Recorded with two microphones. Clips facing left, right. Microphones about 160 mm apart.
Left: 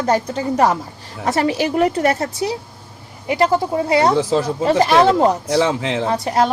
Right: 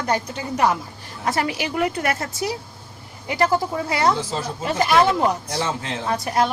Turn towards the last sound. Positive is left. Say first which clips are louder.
# left 4 dB
turn(degrees=30)  # may be behind; listen again after turning